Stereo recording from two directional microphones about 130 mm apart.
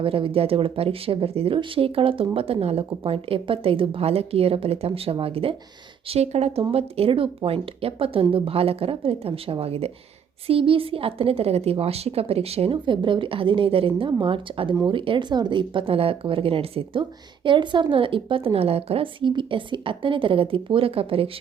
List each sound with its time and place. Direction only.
0.0 s speech: 45° right (ahead or behind)